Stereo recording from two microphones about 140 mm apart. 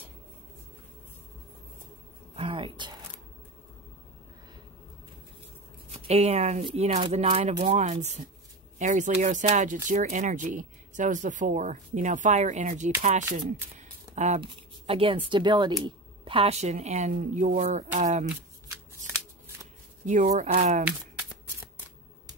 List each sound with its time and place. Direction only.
2.3 s a sound: 35° right (ahead or behind)
5.9 s speech: 50° right (ahead or behind)
13.7 s a sound: 55° right (ahead or behind)
14.4 s speech: 40° right (ahead or behind); by 18.3 s 65° right (ahead or behind)
18.7 s shuffling cards: 15° right (ahead or behind)
20.1 s speech: 60° right (ahead or behind)
20.8 s shuffling cards: 10° right (ahead or behind)